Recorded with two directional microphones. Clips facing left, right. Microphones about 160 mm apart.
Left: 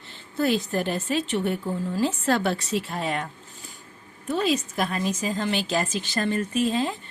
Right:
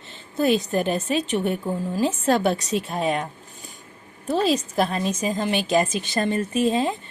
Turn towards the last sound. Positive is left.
turn(degrees=-20)  # may be behind; listen again after turning